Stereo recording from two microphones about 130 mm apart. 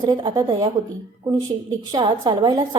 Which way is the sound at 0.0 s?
30° right (ahead or behind).